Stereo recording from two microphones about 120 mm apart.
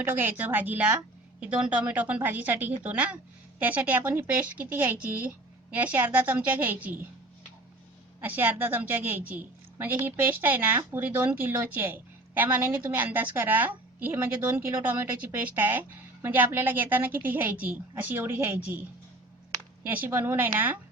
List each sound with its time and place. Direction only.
0.0 s a woman's voice: 15° right (ahead or behind)
8.2 s a woman's voice: 15° right (ahead or behind)
19.8 s a woman's voice: 15° right (ahead or behind)